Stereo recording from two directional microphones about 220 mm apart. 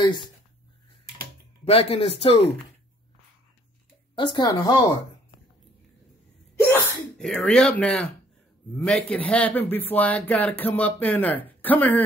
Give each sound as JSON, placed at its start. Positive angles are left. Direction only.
{"t": 0.0, "sound": "speech", "side_deg": 20}
{"t": 1.6, "sound": "speech", "side_deg": 25}
{"t": 4.1, "sound": "speech", "side_deg": 20}
{"t": 6.5, "sound": "a sound", "side_deg": 10}
{"t": 8.7, "sound": "speech", "side_deg": 5}